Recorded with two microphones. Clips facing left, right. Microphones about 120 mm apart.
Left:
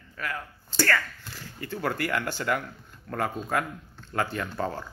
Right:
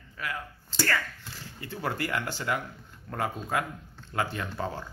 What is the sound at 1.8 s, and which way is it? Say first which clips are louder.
Speech: left 2 dB; 25° right (ahead or behind).